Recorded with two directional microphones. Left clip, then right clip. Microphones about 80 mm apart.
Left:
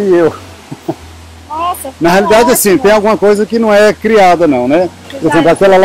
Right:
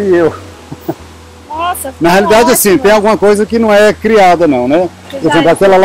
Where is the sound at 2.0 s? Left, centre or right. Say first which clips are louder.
Even; centre.